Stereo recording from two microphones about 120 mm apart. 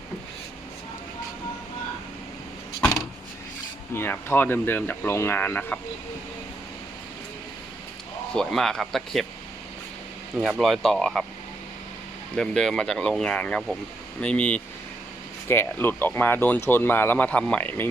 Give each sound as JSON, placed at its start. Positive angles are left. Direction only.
{"t": 3.9, "sound": "speech", "side_deg": 20}
{"t": 8.4, "sound": "speech", "side_deg": 5}
{"t": 10.6, "sound": "speech", "side_deg": 0}
{"t": 12.4, "sound": "speech", "side_deg": 5}